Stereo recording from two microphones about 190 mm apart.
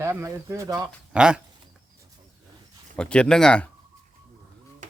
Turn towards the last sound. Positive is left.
turn(degrees=5)  # may be behind; listen again after turning